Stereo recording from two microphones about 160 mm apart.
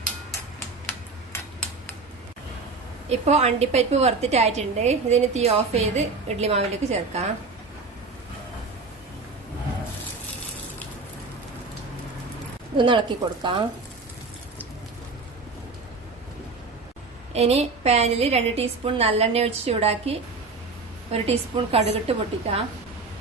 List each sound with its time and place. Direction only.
3.1 s a woman's voice: 40° right (ahead or behind)
12.7 s a woman's voice: 30° right (ahead or behind)
17.3 s a woman's voice: 40° right (ahead or behind)